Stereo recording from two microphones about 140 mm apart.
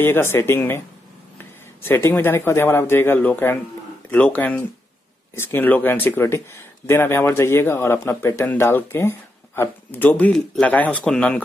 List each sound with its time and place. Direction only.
0.0 s a man's voice: 15° left (ahead or behind)